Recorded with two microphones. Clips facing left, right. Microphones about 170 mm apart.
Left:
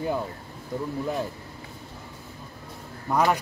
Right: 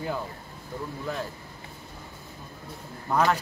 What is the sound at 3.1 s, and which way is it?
Speech, 10° left (ahead or behind).